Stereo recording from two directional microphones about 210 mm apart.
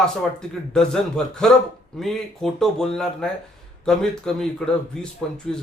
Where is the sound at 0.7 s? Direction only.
5° left (ahead or behind).